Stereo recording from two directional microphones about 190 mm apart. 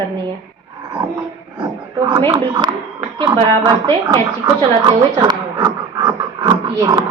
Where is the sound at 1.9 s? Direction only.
20° right (ahead or behind).